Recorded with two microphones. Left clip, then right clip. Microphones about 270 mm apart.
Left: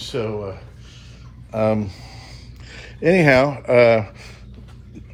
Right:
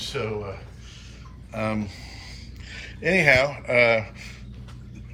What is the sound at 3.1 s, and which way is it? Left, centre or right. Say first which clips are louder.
Speech: left 4 dB; left.